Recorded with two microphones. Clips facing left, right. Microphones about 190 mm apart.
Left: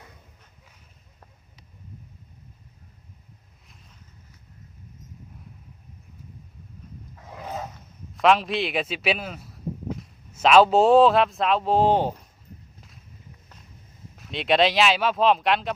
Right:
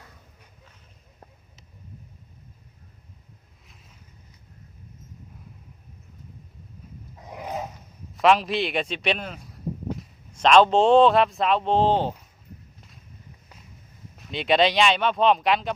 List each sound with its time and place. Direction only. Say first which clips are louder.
7.2 s a sound: right 2 dB; 15° right (ahead or behind)
8.1 s speech: even; centre (ahead or behind)
14.2 s speech: even; centre (ahead or behind)